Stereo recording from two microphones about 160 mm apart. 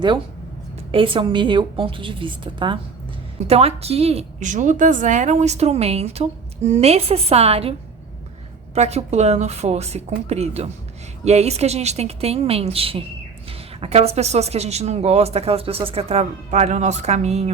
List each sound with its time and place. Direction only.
0.9 s a woman's voice: 35° right (ahead or behind)